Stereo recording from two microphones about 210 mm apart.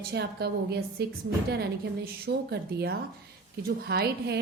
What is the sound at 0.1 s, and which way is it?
A woman's voice, 50° right (ahead or behind).